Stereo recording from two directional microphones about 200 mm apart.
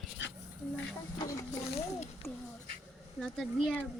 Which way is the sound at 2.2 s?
10° left (ahead or behind).